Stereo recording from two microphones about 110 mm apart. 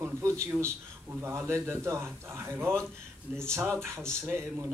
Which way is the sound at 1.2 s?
25° right (ahead or behind).